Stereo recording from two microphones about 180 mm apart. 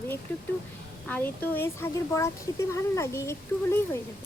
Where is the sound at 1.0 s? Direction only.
10° left (ahead or behind).